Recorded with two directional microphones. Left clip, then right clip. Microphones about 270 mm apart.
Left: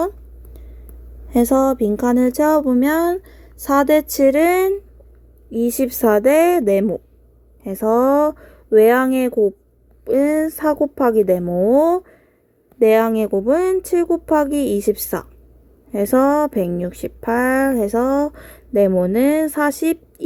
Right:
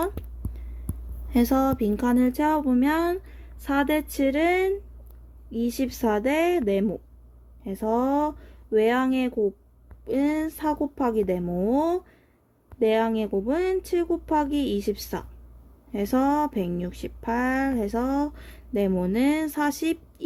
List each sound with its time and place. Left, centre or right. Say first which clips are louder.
1.3 s a woman's voice: left 8 dB; centre
4.1 s speech: left 9 dB; centre